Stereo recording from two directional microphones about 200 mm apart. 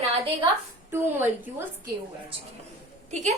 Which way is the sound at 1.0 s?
10° right (ahead or behind).